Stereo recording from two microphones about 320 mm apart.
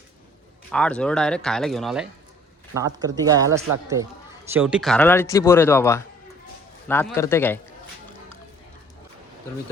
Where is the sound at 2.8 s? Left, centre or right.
Centre.